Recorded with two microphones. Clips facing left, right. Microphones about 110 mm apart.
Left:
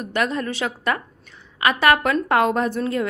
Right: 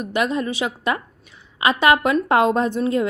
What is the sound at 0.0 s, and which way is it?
A woman's voice, 15° right (ahead or behind).